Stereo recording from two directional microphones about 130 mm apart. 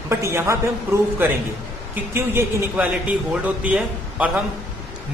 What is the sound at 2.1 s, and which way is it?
A man's voice, 20° right (ahead or behind).